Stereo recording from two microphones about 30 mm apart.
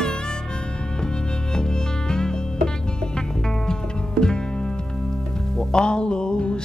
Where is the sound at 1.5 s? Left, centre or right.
Left.